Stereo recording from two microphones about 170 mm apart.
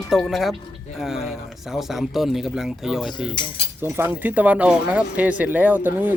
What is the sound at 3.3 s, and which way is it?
Cutlery, 25° left (ahead or behind).